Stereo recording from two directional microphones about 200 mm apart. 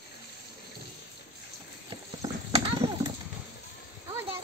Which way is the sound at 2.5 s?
30° right (ahead or behind).